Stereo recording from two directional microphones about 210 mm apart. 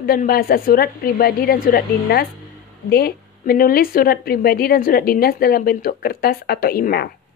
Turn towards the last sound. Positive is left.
turn(degrees=45)  # may be behind; listen again after turning